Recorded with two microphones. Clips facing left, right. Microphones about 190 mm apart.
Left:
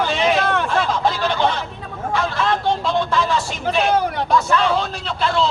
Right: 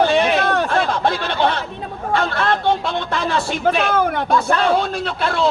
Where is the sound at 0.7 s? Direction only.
60° right (ahead or behind).